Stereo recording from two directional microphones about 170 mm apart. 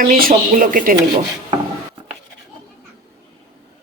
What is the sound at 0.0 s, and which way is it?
Speech, 55° right (ahead or behind).